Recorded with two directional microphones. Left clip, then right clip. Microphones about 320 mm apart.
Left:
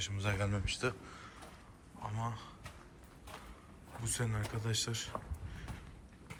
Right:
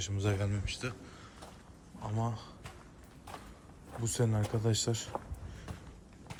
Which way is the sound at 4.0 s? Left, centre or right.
Centre.